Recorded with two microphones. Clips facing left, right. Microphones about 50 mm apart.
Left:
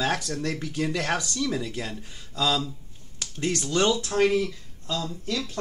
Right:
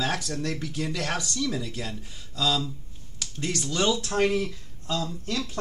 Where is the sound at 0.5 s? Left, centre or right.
Centre.